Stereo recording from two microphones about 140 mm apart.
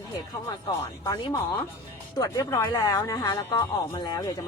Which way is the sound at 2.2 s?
25° left (ahead or behind).